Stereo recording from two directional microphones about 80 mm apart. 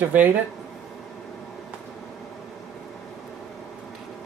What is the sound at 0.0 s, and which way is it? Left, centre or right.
Speech, right.